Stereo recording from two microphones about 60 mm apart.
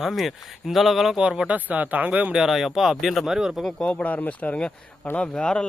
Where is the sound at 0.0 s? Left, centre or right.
Centre.